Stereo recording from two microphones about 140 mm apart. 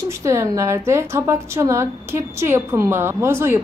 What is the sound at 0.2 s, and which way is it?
A woman's voice, 20° right (ahead or behind).